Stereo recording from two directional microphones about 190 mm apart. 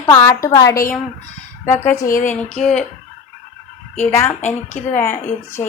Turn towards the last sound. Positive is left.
turn(degrees=15)  # may be behind; listen again after turning